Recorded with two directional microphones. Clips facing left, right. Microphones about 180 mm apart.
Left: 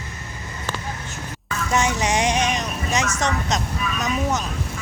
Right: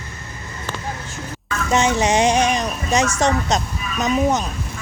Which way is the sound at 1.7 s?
25° right (ahead or behind).